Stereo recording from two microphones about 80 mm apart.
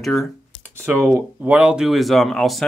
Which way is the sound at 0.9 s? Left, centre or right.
Centre.